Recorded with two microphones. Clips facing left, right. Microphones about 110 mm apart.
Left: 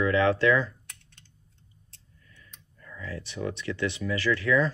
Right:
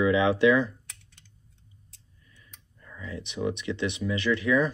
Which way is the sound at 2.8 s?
20° right (ahead or behind).